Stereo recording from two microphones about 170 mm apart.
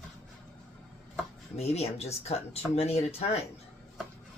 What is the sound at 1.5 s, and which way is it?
Speech, 40° left (ahead or behind).